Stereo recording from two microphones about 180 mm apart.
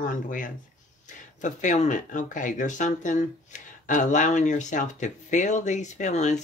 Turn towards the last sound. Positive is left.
turn(degrees=40)  # may be behind; listen again after turning